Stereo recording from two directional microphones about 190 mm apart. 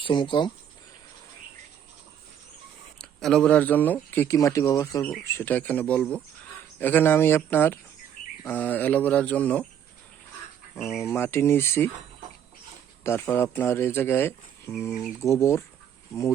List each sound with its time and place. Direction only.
0.0 s speech: 25° left (ahead or behind)
3.0 s speech: 5° left (ahead or behind)
10.9 s speech: 15° left (ahead or behind)
13.2 s speech: 10° left (ahead or behind)